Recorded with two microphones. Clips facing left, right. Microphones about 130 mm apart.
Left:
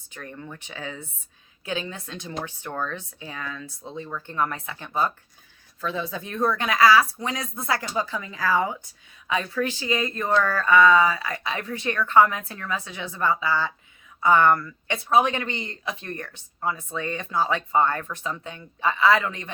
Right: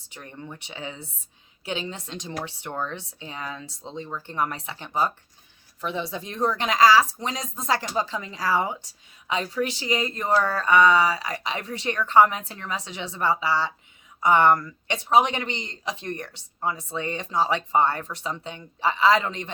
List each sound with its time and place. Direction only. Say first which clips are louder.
0.1 s a woman's voice: left 1 dB; 20° right (ahead or behind)